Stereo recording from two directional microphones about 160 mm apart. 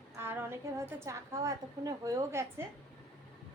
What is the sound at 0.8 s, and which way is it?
A woman's voice, 15° right (ahead or behind).